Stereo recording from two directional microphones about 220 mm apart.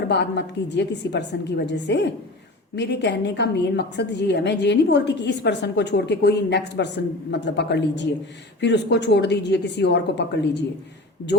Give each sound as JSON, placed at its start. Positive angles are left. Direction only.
{"t": 0.1, "sound": "a woman's voice", "side_deg": 50}